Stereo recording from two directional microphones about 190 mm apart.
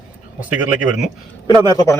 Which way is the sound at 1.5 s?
25° right (ahead or behind).